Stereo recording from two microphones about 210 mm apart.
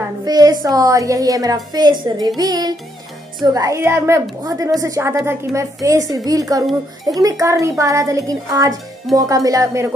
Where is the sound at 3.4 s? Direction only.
15° right (ahead or behind).